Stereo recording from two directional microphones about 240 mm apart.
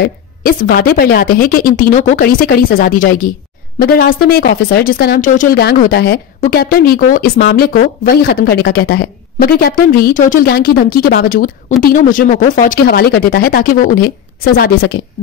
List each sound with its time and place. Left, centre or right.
0.0 s speech: left